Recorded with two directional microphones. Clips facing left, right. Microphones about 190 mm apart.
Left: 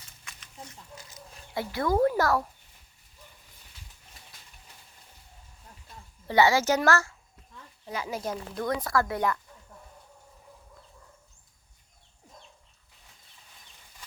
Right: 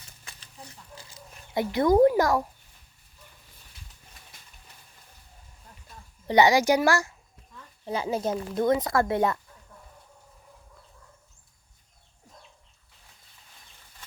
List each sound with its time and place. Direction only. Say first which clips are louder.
0.3 s chicken: left 1 dB; 35° right (ahead or behind)
1.5 s speech: right 6 dB; 20° right (ahead or behind)
6.2 s speech: right 3 dB; 20° right (ahead or behind)
7.9 s speech: right 5 dB; 30° right (ahead or behind)